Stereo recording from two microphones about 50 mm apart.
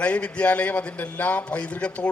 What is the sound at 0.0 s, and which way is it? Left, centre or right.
A man's voice, left.